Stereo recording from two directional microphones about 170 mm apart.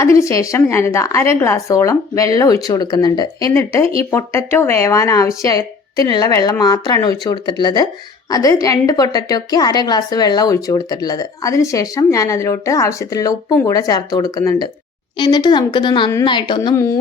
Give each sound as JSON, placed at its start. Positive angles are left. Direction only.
{"t": 0.0, "sound": "a woman's voice", "side_deg": 15}